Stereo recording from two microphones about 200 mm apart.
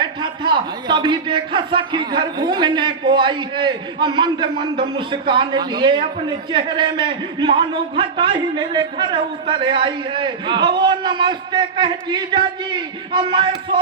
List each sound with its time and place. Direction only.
0.0 s a man's voice: 25° right (ahead or behind)